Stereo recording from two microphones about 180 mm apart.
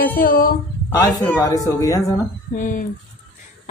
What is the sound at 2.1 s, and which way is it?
Speech, 45° left (ahead or behind).